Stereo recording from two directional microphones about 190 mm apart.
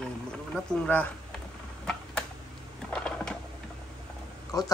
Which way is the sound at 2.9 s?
5° left (ahead or behind).